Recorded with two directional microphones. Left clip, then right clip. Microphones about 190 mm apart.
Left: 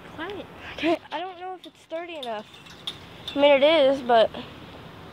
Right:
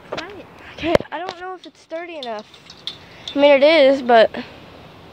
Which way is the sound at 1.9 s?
35° right (ahead or behind).